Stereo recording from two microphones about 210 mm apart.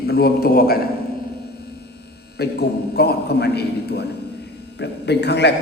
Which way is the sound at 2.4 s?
50° left (ahead or behind).